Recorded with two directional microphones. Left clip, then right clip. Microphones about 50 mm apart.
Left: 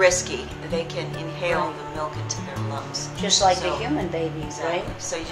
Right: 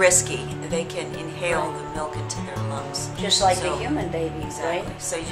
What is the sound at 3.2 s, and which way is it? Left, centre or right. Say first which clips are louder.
A woman's voice: left 1 dB; centre.